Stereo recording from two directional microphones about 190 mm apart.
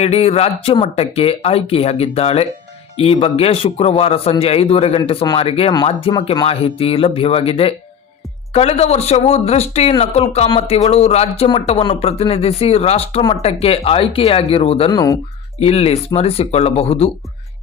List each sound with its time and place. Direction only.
0.0 s a man's voice: 30° left (ahead or behind)
15.5 s speech: 35° left (ahead or behind)